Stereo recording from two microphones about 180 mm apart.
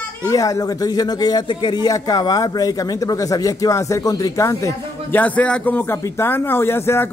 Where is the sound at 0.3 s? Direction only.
20° left (ahead or behind).